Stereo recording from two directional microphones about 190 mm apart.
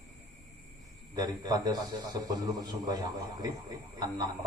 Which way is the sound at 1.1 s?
20° right (ahead or behind).